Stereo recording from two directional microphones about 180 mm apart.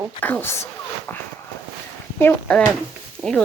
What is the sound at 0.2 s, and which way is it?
Speech, 10° left (ahead or behind).